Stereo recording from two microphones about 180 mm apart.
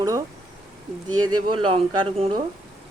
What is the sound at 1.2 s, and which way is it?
Speech, 30° right (ahead or behind).